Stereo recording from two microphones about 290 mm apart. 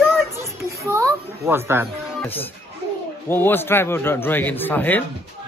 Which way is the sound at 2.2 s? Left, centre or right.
Centre.